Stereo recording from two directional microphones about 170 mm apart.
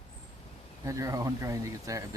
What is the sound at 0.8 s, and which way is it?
Speech, 20° right (ahead or behind).